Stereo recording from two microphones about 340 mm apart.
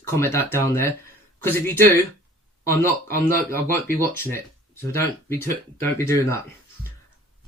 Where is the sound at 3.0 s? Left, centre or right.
Right.